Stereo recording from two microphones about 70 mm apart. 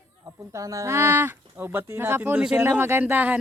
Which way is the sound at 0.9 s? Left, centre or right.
Right.